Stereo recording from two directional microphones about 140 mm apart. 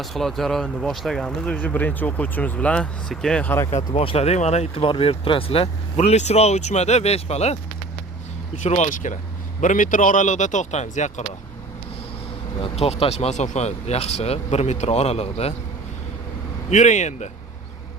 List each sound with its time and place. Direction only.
0.0 s speech: centre (ahead or behind)
3.7 s speech: 45° left (ahead or behind)
8.6 s speech: 55° left (ahead or behind)
12.5 s speech: 40° left (ahead or behind)
16.6 s speech: 60° left (ahead or behind)